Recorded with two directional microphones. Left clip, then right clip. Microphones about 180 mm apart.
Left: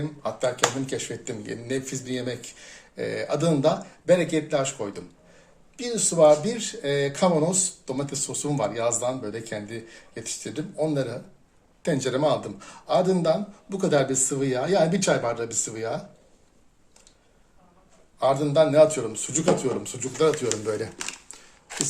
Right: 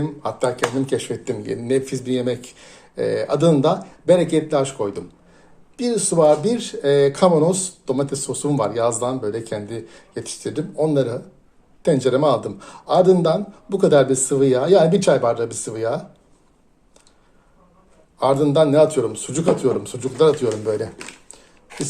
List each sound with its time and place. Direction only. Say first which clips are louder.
0.0 s speech: right 5 dB; 35° right (ahead or behind)
18.2 s speech: right 4 dB; 35° right (ahead or behind)
20.7 s speech: right 5 dB; centre (ahead or behind)